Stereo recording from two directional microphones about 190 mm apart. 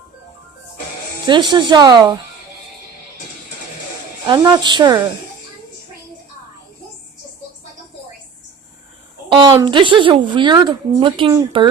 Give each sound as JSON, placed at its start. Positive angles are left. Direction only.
{"t": 1.3, "sound": "speech", "side_deg": -25}
{"t": 4.3, "sound": "speech", "side_deg": -20}
{"t": 9.6, "sound": "speech", "side_deg": -25}